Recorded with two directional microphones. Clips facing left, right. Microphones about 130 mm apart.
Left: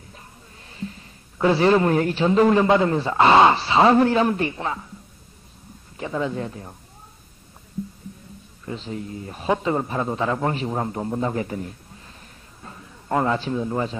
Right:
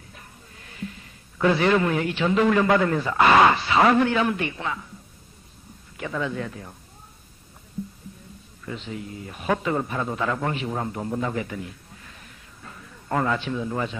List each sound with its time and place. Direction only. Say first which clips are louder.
0.1 s a man's voice: left 1 dB; 30° left (ahead or behind)
5.9 s speech: left 2 dB; 30° left (ahead or behind)
8.6 s a man's voice: left 3 dB; 35° left (ahead or behind)
12.6 s a sound: left 3 dB; 25° left (ahead or behind)
13.4 s speech: left 3 dB; 35° left (ahead or behind)